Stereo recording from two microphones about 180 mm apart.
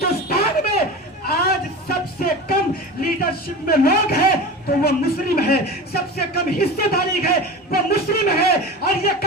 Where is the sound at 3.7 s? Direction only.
55° left (ahead or behind).